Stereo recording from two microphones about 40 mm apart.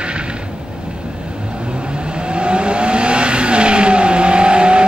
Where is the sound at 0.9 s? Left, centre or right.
Right.